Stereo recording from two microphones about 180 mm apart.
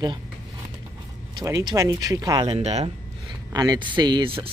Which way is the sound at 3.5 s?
20° right (ahead or behind).